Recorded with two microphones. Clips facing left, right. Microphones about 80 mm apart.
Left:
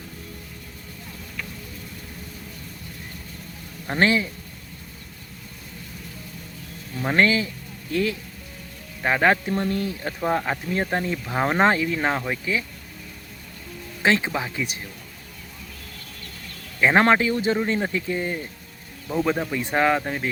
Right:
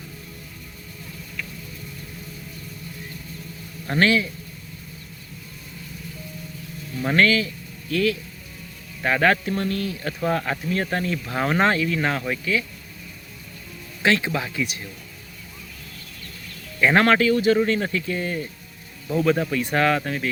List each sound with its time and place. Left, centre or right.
3.8 s speech: left
7.0 s speech: left
14.0 s speech: left
16.8 s speech: left